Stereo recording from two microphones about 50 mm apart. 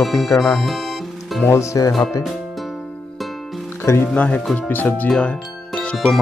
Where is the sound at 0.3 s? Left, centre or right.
Left.